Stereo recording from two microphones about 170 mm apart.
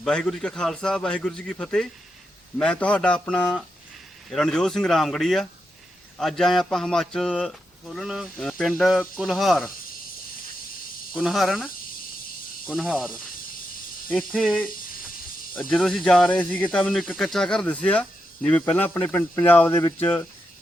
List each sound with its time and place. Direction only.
0.0 s speech: 5° left (ahead or behind)
11.1 s speech: centre (ahead or behind)
14.1 s speech: centre (ahead or behind)